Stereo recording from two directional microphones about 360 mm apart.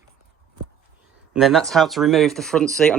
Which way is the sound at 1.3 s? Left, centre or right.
Centre.